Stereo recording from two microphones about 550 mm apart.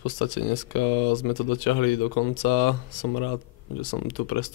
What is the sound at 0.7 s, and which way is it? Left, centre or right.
Speech, left.